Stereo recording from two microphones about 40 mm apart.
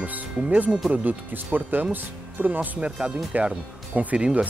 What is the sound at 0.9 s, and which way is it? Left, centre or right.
Speech, right.